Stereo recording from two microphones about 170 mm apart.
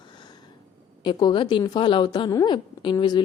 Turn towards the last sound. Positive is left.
turn(degrees=25)  # may be behind; listen again after turning